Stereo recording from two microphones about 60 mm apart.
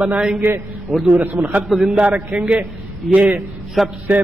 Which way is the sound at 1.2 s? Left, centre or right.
Right.